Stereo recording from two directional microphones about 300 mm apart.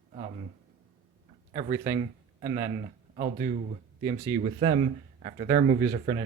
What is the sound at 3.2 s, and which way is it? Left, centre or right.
Speech, right.